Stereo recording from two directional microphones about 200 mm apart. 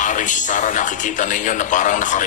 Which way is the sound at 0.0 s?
40° left (ahead or behind).